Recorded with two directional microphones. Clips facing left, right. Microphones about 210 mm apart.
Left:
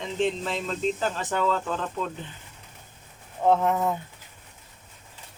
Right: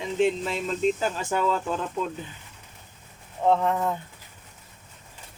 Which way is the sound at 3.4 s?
5° left (ahead or behind).